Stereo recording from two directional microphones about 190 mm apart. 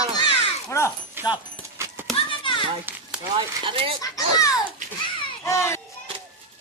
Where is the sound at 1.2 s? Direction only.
10° right (ahead or behind).